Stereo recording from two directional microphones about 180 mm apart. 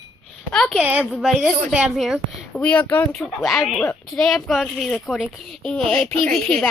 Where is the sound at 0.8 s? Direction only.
10° right (ahead or behind).